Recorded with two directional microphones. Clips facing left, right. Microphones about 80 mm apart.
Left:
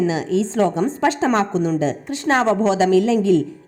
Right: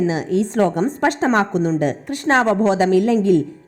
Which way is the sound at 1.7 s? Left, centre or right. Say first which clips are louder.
Right 1 dB; right.